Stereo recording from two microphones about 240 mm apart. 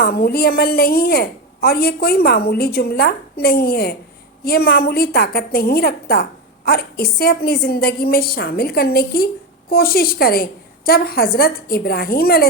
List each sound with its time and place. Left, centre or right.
0.0 s a woman's voice: left